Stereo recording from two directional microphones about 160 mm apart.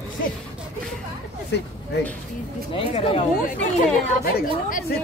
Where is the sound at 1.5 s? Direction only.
90° left.